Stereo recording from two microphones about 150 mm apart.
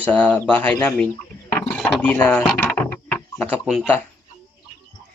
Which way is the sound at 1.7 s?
10° left (ahead or behind).